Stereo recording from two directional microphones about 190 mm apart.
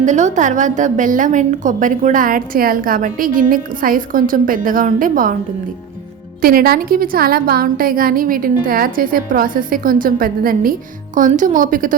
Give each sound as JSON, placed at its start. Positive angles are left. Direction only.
{"t": 0.0, "sound": "a woman's voice", "side_deg": -40}
{"t": 6.4, "sound": "a woman's voice", "side_deg": -50}